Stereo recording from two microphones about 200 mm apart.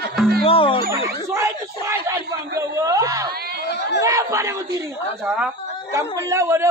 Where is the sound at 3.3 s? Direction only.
55° right (ahead or behind).